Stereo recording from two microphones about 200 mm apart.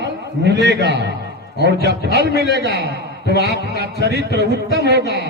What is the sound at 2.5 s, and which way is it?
Speech, 55° right (ahead or behind).